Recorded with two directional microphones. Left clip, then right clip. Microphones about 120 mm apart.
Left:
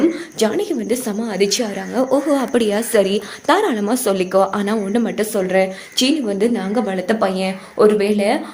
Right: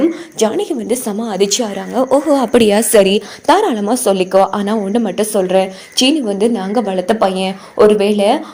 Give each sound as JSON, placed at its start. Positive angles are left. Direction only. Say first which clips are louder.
{"t": 0.0, "sound": "a sound", "louder": "right 3 dB", "side_deg": -25}
{"t": 1.0, "sound": "a woman's voice", "louder": "right 3 dB", "side_deg": -40}
{"t": 2.5, "sound": "a woman's voice", "louder": "right 7 dB", "side_deg": -85}
{"t": 3.2, "sound": "a woman's voice", "louder": "right 4 dB", "side_deg": -35}